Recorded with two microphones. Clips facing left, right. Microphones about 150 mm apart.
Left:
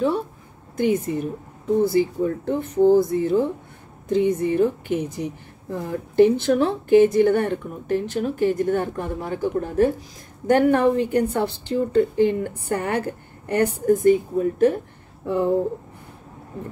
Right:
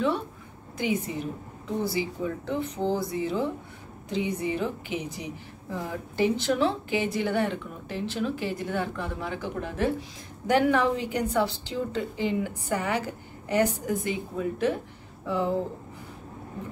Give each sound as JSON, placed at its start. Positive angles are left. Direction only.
{"t": 0.7, "sound": "a woman's voice", "side_deg": 50}